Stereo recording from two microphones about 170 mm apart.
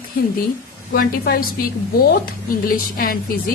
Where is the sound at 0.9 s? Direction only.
60° left (ahead or behind).